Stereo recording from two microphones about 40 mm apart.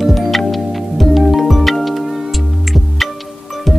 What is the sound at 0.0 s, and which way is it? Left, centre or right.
Music, centre.